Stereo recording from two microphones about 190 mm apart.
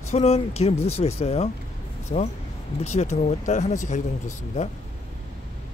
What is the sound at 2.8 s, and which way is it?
Speech, 35° left (ahead or behind).